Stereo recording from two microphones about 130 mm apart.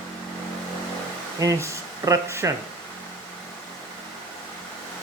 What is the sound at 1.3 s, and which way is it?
Speech, 25° right (ahead or behind).